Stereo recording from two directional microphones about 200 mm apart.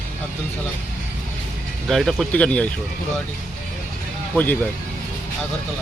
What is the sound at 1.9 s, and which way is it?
Speech, centre (ahead or behind).